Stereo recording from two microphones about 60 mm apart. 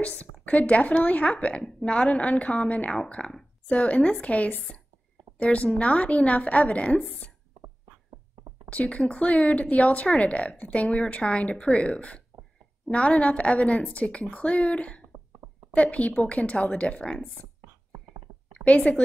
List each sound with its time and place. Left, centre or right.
0.0 s speech: left
8.7 s a woman's voice: left
18.5 s a woman's voice: centre